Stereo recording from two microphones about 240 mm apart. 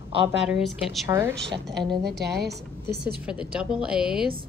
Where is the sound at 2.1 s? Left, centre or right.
Centre.